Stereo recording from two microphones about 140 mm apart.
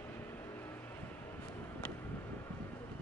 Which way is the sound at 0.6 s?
15° left (ahead or behind).